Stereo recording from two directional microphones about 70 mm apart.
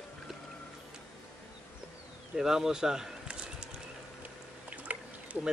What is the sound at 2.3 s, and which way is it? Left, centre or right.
Speech, centre.